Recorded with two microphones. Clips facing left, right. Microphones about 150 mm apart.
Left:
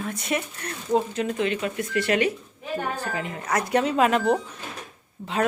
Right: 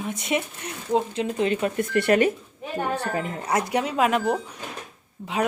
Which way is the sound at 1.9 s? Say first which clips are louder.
Right 3 dB; 55° right (ahead or behind).